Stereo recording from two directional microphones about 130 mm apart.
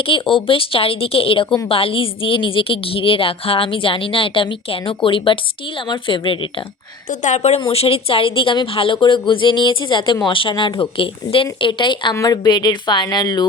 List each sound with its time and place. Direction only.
0.0 s a woman's voice: 40° left (ahead or behind)
7.1 s a woman's voice: 70° left (ahead or behind); by 12.1 s 40° left (ahead or behind)
12.1 s a woman's voice: 25° left (ahead or behind)